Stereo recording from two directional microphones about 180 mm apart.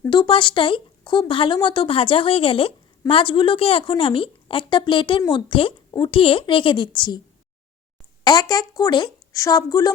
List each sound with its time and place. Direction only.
0.0 s a woman's voice: 25° left (ahead or behind)
8.2 s a woman's voice: 25° left (ahead or behind)